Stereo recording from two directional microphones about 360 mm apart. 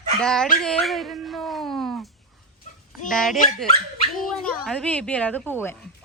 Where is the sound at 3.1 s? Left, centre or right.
Centre.